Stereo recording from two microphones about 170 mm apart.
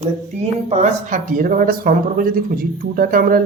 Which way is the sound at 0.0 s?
40° right (ahead or behind).